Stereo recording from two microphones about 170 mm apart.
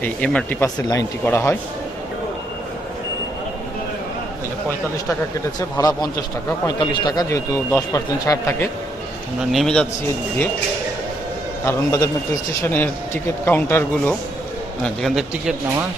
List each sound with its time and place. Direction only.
0.0 s a man's voice: 10° left (ahead or behind)
5.5 s speech: 20° left (ahead or behind)
9.4 s a man's voice: centre (ahead or behind)
11.6 s a man's voice: 15° left (ahead or behind)
14.8 s a man's voice: centre (ahead or behind)